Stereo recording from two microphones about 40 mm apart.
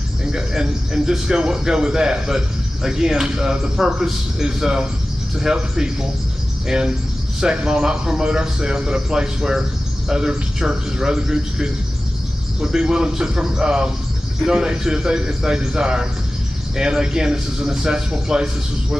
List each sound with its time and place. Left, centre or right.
0.2 s a man's voice: centre